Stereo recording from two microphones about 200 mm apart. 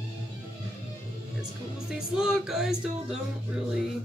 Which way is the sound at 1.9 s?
5° right (ahead or behind).